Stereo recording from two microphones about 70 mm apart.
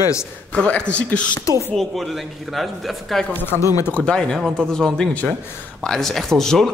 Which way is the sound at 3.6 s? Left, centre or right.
Left.